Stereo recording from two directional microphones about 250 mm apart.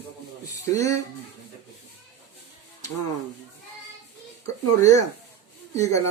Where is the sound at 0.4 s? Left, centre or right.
Centre.